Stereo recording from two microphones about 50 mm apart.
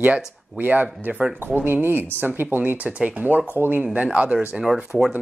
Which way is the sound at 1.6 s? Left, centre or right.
Right.